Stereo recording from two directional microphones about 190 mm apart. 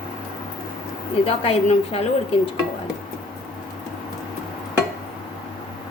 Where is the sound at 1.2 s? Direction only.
30° left (ahead or behind).